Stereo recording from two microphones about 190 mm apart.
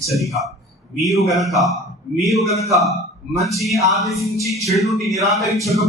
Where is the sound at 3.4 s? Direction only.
Centre (ahead or behind).